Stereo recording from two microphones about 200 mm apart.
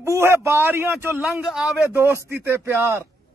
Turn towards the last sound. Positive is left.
turn(degrees=-10)  # may be behind; listen again after turning